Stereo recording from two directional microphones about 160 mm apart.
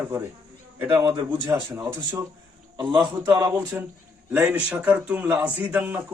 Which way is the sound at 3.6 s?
15° right (ahead or behind).